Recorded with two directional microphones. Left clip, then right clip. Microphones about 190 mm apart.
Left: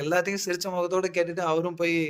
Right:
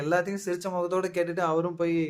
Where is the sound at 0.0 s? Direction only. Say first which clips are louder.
Left 1 dB; 45° left (ahead or behind).